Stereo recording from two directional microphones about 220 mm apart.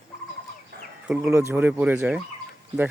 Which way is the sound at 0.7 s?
50° right (ahead or behind).